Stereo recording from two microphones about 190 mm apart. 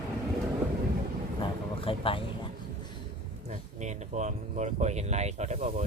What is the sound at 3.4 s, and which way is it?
Speech, 40° right (ahead or behind).